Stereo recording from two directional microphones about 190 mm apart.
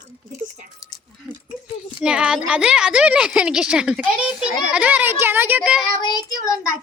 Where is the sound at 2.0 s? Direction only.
5° right (ahead or behind).